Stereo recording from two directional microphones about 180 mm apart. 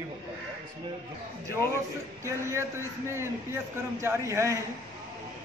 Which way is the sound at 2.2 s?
15° right (ahead or behind).